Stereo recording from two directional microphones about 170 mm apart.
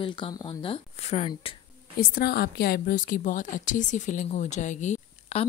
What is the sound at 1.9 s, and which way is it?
A woman's voice, 65° left (ahead or behind).